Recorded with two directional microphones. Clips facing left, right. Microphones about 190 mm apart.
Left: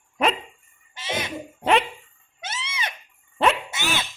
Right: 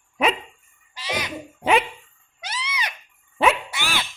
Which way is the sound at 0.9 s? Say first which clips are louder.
Even; 25° left (ahead or behind).